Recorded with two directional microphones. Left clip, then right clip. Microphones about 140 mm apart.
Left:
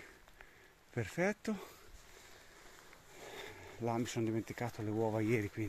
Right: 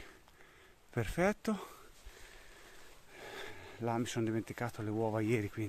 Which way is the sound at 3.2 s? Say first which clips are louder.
Right 2 dB; 20° right (ahead or behind).